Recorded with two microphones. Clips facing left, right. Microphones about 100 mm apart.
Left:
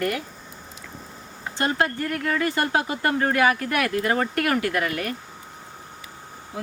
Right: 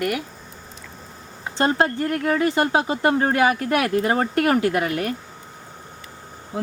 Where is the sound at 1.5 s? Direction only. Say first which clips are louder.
Right 4 dB; 30° right (ahead or behind).